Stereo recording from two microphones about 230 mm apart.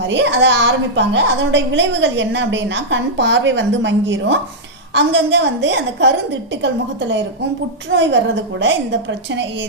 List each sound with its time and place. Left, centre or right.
0.0 s a woman's voice: right
7.9 s a woman's voice: right